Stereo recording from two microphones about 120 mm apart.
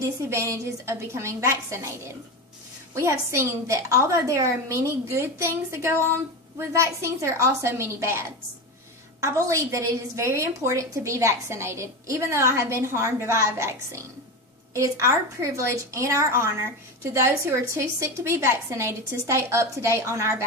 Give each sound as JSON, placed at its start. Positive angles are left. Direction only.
{"t": 0.0, "sound": "a woman's voice", "side_deg": -25}
{"t": 2.9, "sound": "a woman's voice", "side_deg": -25}
{"t": 9.2, "sound": "a woman's voice", "side_deg": -25}